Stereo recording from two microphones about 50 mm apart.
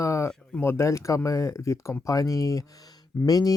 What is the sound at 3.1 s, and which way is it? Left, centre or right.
Speech, left.